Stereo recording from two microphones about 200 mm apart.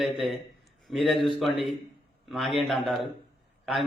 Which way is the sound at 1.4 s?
30° left (ahead or behind).